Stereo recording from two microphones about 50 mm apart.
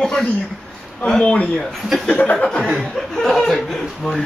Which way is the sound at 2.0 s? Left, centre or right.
Left.